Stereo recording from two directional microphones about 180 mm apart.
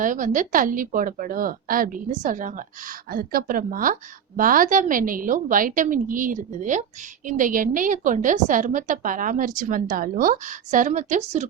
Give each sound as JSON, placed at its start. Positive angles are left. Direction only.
{"t": 0.0, "sound": "a woman's voice", "side_deg": -45}